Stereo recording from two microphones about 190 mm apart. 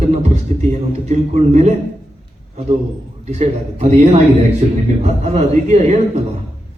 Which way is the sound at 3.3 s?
35° right (ahead or behind).